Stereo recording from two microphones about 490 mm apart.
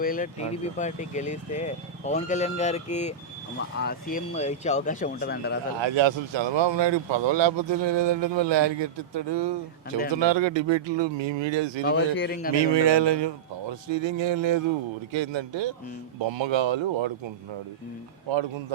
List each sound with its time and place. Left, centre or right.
0.0 s speech: centre
5.8 s speech: right
11.8 s a man's voice: left
12.7 s speech: right